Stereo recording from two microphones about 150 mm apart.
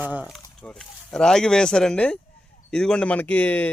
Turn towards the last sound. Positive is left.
turn(degrees=10)  # may be behind; listen again after turning